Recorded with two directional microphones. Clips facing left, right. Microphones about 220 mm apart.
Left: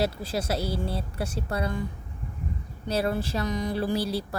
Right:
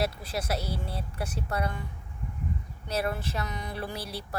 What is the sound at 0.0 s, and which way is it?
Speech, 30° left (ahead or behind).